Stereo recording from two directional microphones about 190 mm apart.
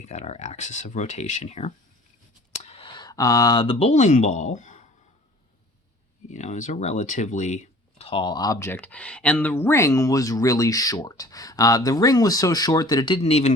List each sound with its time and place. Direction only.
0.0 s speech: 35° left (ahead or behind)
6.2 s speech: 40° left (ahead or behind)